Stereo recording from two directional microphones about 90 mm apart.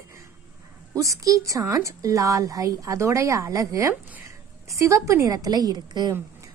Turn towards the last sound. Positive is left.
turn(degrees=-50)  # may be behind; listen again after turning